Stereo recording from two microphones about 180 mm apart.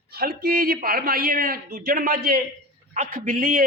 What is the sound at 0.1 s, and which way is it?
A man's voice, 55° right (ahead or behind).